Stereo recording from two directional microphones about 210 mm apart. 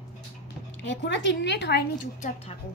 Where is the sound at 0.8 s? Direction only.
55° left (ahead or behind).